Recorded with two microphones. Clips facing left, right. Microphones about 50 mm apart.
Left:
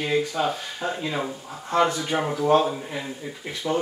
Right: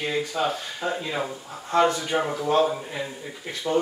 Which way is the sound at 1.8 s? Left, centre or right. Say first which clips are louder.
Right 1 dB; centre.